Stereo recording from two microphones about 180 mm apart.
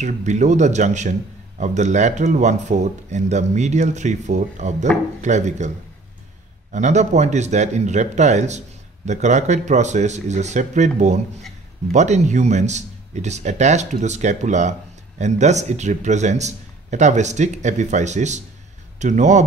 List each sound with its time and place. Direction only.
0.0 s speech: 40° right (ahead or behind)
6.7 s speech: 40° right (ahead or behind)